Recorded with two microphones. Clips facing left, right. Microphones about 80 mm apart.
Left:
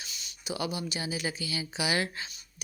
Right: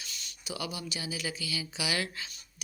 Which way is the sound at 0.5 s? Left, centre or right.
Left.